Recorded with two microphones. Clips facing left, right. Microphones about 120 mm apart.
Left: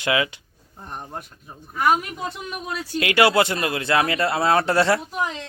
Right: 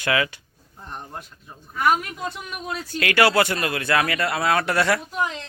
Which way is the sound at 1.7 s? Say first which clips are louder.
Left 1 dB; 15° left (ahead or behind).